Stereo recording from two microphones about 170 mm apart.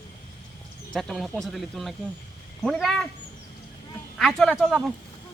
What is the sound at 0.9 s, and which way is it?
Speech, centre (ahead or behind).